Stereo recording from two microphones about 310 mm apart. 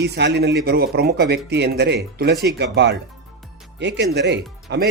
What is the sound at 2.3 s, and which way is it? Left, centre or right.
Speech, centre.